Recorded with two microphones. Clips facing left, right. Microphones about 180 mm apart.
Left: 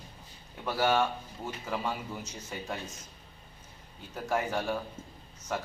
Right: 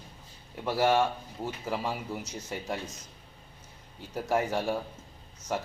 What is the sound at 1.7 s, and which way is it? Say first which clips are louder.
Speech: right 1 dB; 5° right (ahead or behind).